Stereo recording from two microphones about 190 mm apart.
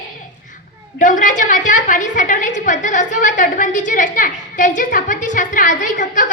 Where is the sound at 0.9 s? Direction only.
45° left (ahead or behind).